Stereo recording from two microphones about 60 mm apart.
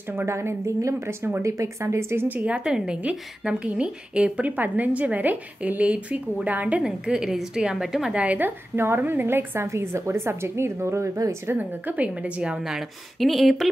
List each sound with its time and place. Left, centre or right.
0.1 s speech: right
2.2 s a woman's voice: right
2.5 s a woman's voice: centre
6.8 s a woman's voice: centre
8.2 s a woman's voice: right
9.7 s speech: right
11.5 s a woman's voice: right
13.2 s speech: centre